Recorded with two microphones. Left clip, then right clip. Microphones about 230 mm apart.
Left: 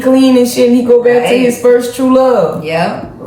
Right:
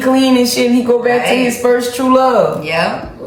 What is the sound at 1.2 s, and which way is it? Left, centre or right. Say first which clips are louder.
Speech: left 3 dB; centre.